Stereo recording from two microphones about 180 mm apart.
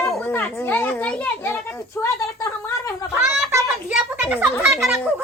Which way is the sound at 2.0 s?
15° left (ahead or behind).